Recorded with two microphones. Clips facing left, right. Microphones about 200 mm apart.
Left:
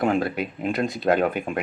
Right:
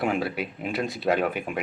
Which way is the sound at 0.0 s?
5° right (ahead or behind).